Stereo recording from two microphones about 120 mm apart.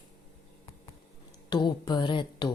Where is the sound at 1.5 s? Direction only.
35° left (ahead or behind).